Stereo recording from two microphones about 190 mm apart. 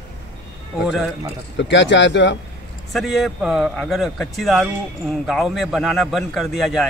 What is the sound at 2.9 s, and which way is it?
Speech, centre (ahead or behind).